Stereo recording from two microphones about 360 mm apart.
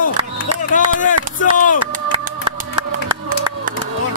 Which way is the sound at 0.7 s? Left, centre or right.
Left.